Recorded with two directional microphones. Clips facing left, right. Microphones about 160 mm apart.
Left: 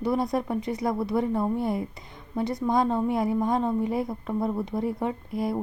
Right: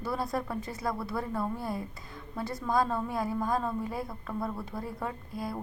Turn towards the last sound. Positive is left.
turn(degrees=25)  # may be behind; listen again after turning